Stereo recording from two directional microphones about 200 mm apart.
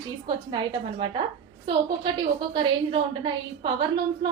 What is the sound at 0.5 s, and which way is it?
Speech, 25° right (ahead or behind).